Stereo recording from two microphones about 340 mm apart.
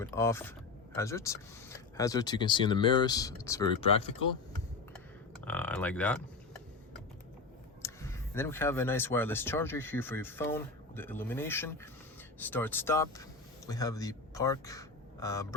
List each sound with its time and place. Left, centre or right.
0.0 s speech: centre
5.5 s speech: centre
7.8 s speech: centre